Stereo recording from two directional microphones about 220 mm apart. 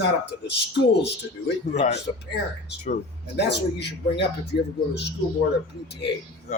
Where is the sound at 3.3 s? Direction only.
50° left (ahead or behind).